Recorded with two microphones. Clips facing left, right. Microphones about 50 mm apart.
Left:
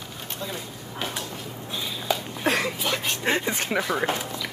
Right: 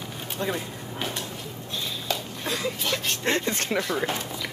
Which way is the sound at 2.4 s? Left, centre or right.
Left.